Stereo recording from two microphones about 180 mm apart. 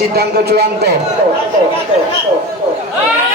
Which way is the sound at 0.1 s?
60° right (ahead or behind).